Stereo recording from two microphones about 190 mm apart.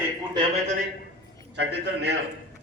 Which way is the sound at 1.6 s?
65° right (ahead or behind).